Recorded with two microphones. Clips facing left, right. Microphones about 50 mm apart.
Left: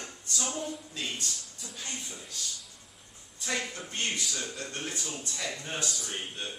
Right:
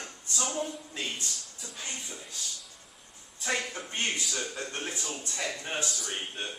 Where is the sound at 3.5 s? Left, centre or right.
Centre.